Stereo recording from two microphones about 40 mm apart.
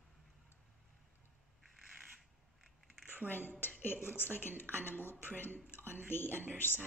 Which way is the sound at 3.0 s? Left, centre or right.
Right.